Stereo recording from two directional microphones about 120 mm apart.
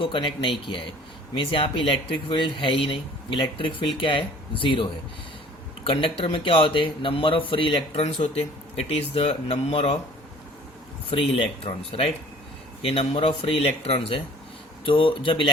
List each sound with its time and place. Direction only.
0.0 s speech: 45° left (ahead or behind)
8.0 s speech: 65° left (ahead or behind)
11.1 s speech: 55° left (ahead or behind)
14.8 s speech: 45° left (ahead or behind)